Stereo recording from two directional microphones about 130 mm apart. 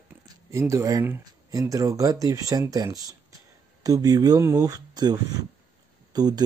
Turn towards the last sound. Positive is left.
turn(degrees=-30)  # may be behind; listen again after turning